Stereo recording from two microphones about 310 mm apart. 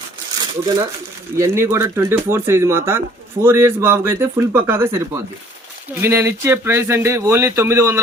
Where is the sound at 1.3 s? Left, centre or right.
Centre.